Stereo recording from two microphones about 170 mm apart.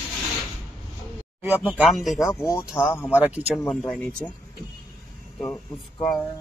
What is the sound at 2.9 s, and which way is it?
Speech, 10° left (ahead or behind).